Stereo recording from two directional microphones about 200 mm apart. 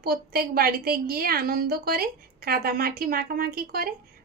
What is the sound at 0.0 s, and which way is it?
A woman's voice, 50° right (ahead or behind).